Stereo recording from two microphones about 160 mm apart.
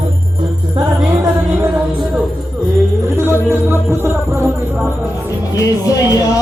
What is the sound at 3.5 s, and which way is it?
Music, 15° right (ahead or behind).